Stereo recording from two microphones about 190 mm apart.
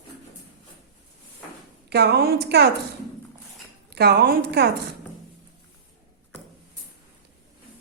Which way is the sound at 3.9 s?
60° right (ahead or behind).